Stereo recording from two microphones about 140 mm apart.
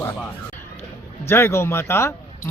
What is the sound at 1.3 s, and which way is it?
Speech, 20° left (ahead or behind).